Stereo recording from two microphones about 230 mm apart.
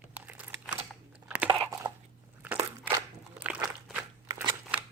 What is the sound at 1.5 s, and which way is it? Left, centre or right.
Crunch, right.